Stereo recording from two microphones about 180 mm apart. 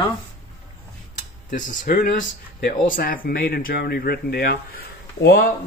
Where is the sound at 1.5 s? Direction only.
50° left (ahead or behind).